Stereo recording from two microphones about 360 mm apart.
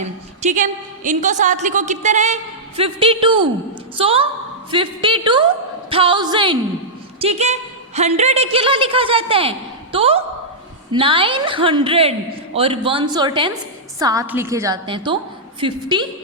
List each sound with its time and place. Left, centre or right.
0.0 s a woman's voice: centre